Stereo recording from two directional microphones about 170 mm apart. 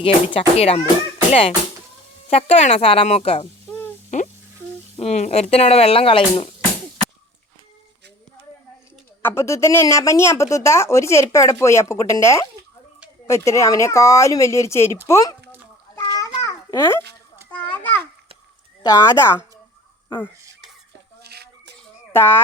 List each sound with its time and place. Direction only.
0.0 s speech: 35° left (ahead or behind)
3.7 s a sound: 10° left (ahead or behind)
4.9 s speech: 40° left (ahead or behind)
9.2 s a woman's voice: 15° left (ahead or behind)
16.0 s babbling: 15° left (ahead or behind)
17.6 s a sound: 10° left (ahead or behind)
18.8 s speech: 20° left (ahead or behind)
21.2 s a sound: 75° right (ahead or behind)
22.1 s speech: 15° left (ahead or behind)